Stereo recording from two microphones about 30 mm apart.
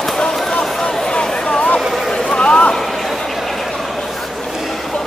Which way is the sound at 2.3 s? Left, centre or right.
Left.